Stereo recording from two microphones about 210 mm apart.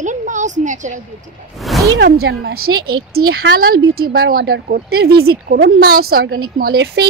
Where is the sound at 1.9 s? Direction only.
55° right (ahead or behind).